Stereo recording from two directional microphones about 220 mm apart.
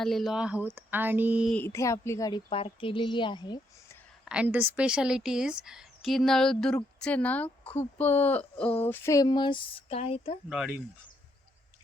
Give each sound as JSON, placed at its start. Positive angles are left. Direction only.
{"t": 0.0, "sound": "speech", "side_deg": 0}
{"t": 1.5, "sound": "speech", "side_deg": 10}
{"t": 4.3, "sound": "a woman's voice", "side_deg": -5}
{"t": 10.5, "sound": "a woman's voice", "side_deg": -5}